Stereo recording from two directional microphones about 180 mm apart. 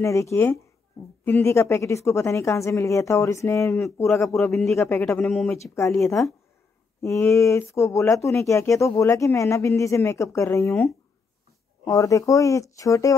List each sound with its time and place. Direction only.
0.0 s speech: 15° left (ahead or behind)
4.3 s speech: centre (ahead or behind)
4.7 s speech: 15° left (ahead or behind)
5.2 s speech: 5° left (ahead or behind)
7.0 s speech: 15° left (ahead or behind)